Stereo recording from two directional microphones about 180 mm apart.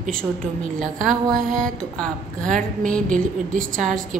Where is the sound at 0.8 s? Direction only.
50° right (ahead or behind).